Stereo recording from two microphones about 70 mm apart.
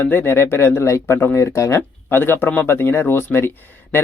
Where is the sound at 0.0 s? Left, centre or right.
Left.